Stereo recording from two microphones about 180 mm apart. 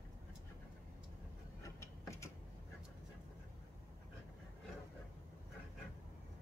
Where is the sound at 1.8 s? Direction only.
15° left (ahead or behind).